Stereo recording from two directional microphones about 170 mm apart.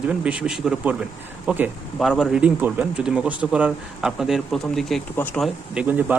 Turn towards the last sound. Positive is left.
turn(degrees=-10)  # may be behind; listen again after turning